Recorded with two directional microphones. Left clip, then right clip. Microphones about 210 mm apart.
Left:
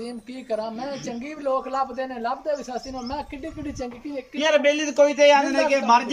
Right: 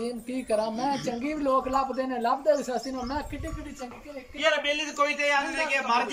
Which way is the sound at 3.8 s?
35° left (ahead or behind).